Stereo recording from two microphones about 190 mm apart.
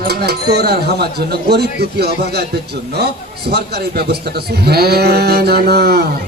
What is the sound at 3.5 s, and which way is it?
Speech, 55° right (ahead or behind).